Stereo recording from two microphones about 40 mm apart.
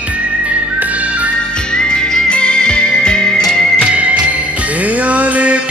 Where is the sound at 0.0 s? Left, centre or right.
Right.